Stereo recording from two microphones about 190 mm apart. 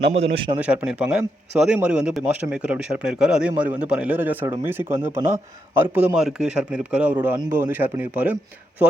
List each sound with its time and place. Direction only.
0.1 s a man's voice: 30° right (ahead or behind)
0.6 s a man's voice: 5° right (ahead or behind)